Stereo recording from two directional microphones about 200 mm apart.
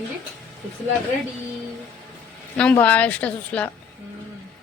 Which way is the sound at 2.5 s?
5° left (ahead or behind).